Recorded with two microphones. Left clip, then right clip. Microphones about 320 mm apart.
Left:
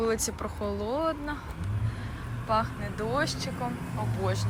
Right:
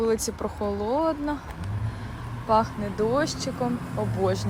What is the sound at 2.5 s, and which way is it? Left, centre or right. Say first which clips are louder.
Speech: right 6 dB; centre.